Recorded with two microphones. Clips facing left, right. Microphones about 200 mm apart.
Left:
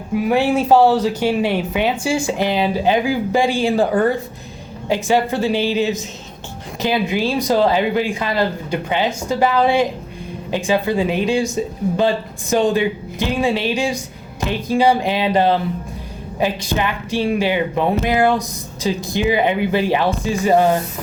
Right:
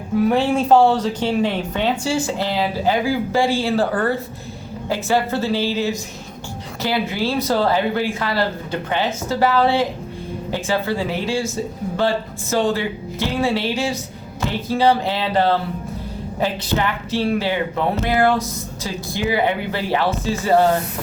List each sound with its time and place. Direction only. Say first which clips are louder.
0.2 s speech: even; 10° left (ahead or behind)